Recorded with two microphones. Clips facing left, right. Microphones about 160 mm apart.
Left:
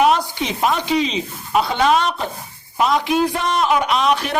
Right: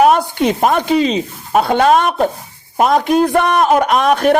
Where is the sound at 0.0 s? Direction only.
50° right (ahead or behind).